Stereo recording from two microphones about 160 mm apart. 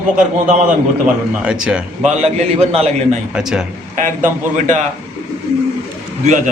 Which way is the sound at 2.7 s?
40° right (ahead or behind).